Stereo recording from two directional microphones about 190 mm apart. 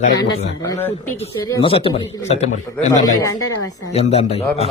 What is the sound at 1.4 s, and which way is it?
A man's voice, 25° left (ahead or behind).